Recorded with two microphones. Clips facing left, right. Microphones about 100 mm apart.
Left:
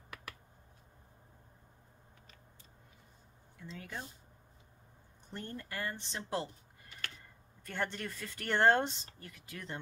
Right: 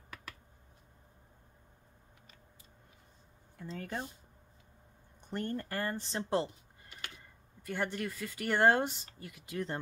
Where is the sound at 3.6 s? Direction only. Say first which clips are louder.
Right 6 dB; 45° right (ahead or behind).